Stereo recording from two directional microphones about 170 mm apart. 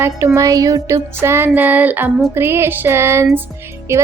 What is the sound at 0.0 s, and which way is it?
A woman's voice, 15° right (ahead or behind).